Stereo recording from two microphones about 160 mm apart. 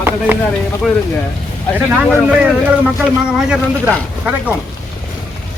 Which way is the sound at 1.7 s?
5° right (ahead or behind).